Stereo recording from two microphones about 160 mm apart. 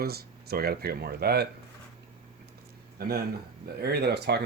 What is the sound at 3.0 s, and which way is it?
Speech, 75° right (ahead or behind).